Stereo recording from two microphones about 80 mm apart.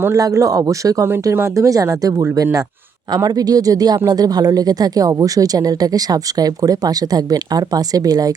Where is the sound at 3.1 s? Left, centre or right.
Right.